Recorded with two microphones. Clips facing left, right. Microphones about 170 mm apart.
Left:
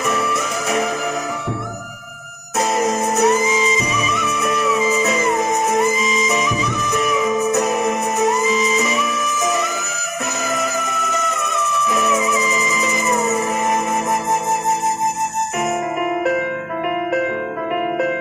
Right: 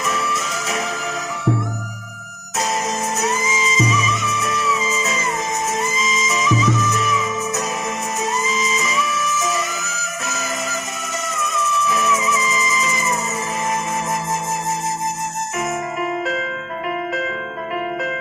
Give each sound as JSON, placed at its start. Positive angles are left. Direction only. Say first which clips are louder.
{"t": 0.0, "sound": "music", "louder": "left 3 dB", "side_deg": 60}
{"t": 2.6, "sound": "music", "louder": "left 4 dB", "side_deg": 55}
{"t": 12.3, "sound": "music", "louder": "left 2 dB", "side_deg": 15}
{"t": 12.6, "sound": "music", "louder": "left 2 dB", "side_deg": 60}